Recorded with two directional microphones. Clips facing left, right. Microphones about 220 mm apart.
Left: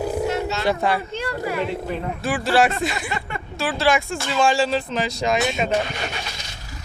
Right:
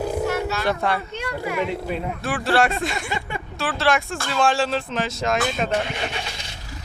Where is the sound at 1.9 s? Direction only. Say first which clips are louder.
Left 1 dB; 5° right (ahead or behind).